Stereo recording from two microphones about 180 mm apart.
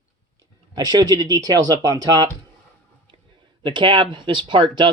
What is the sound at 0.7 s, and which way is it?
Speech, 20° right (ahead or behind).